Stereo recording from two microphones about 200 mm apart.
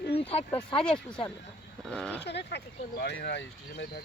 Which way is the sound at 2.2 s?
55° left (ahead or behind).